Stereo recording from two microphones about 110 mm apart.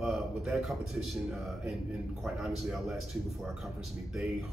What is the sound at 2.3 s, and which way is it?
Speech, 5° right (ahead or behind).